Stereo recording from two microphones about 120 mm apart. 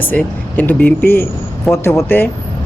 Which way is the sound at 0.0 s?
15° left (ahead or behind).